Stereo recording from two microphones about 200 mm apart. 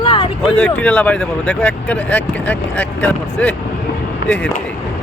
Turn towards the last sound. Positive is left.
turn(degrees=5)  # may be behind; listen again after turning